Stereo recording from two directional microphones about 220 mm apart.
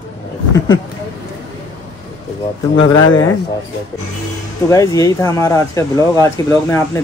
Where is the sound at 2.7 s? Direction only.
60° left (ahead or behind).